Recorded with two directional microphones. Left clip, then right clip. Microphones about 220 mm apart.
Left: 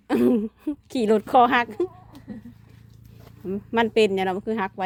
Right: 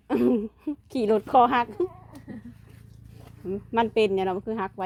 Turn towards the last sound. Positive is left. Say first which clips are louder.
# left 3 dB
turn(degrees=20)  # may be behind; listen again after turning